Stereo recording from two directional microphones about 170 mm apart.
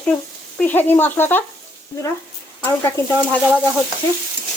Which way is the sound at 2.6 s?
15° left (ahead or behind).